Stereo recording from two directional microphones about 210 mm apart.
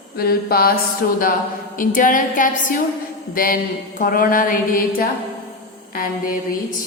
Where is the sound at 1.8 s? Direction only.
40° left (ahead or behind).